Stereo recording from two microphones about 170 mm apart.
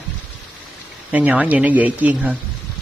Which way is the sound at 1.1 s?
10° right (ahead or behind).